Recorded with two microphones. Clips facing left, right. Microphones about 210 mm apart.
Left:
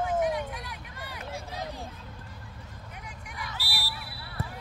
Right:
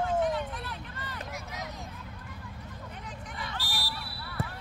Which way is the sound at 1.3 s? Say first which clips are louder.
Left 3 dB; 30° left (ahead or behind).